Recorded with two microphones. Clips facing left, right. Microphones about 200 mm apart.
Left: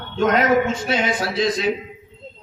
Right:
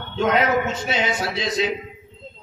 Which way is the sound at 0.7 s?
25° right (ahead or behind).